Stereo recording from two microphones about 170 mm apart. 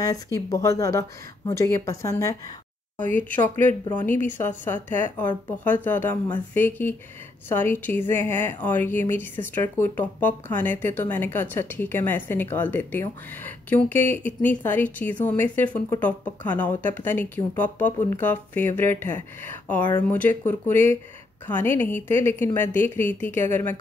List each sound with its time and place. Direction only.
0.0 s speech: 20° left (ahead or behind)